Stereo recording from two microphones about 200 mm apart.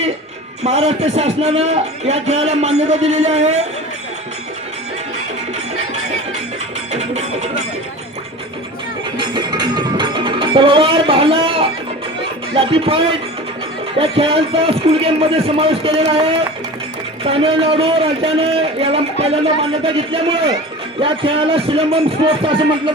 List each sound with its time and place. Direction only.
0.6 s speech: 35° right (ahead or behind)
6.9 s music: 35° right (ahead or behind)
9.1 s music: 25° right (ahead or behind)
12.5 s a man's voice: 25° right (ahead or behind)